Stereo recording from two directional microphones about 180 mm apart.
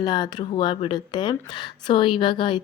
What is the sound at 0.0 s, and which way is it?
Speech, 25° left (ahead or behind).